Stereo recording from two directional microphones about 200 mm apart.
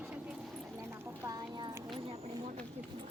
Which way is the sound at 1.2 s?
20° right (ahead or behind).